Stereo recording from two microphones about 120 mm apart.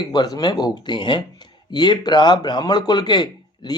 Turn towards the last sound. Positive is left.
turn(degrees=35)  # may be behind; listen again after turning